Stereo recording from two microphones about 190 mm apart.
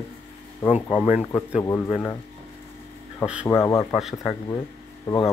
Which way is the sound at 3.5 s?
15° left (ahead or behind).